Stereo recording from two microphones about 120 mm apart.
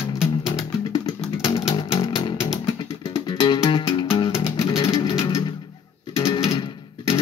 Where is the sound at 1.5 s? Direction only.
40° left (ahead or behind).